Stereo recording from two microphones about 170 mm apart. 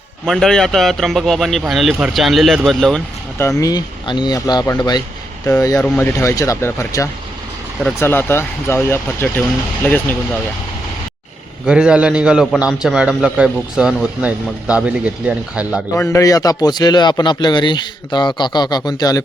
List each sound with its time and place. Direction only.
0.3 s a man's voice: 5° left (ahead or behind)
3.6 s speech: 25° left (ahead or behind)
11.6 s a man's voice: 5° right (ahead or behind)
16.0 s speech: 15° left (ahead or behind)